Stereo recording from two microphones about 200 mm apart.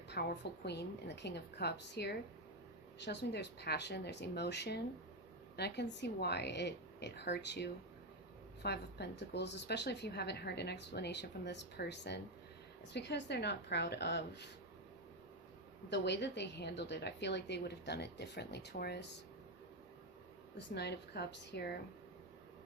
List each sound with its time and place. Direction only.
0.1 s speech: 50° left (ahead or behind)
15.9 s speech: 60° left (ahead or behind)
20.7 s speech: 55° left (ahead or behind)